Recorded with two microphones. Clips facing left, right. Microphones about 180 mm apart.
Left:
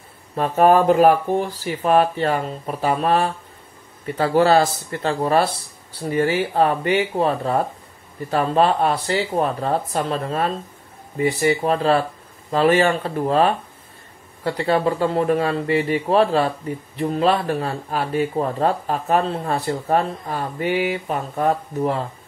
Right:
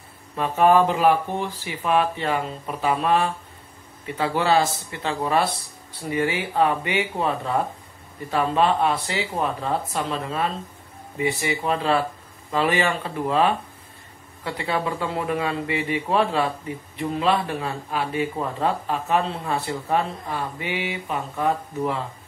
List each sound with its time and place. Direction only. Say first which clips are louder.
0.4 s speech: left 2 dB; 45° left (ahead or behind)